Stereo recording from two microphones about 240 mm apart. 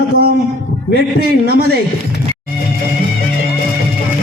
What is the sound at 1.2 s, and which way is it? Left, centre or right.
Speech, right.